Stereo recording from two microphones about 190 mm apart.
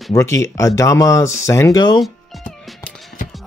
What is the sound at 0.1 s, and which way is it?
Speech, 15° left (ahead or behind).